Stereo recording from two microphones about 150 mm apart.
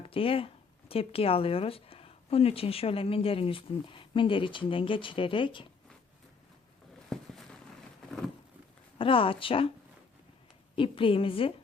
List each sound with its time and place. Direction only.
0.0 s speech: 40° left (ahead or behind)
7.1 s a sound: 5° left (ahead or behind)
9.0 s speech: 35° left (ahead or behind)
10.8 s speech: 35° left (ahead or behind)